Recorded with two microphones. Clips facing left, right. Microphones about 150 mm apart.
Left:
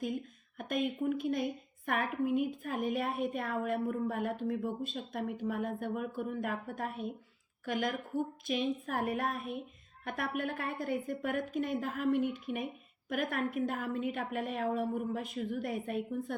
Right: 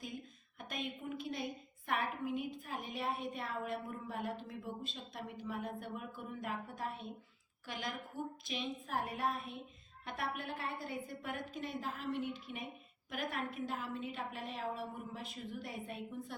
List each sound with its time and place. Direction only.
0.6 s a woman's voice: 50° left (ahead or behind)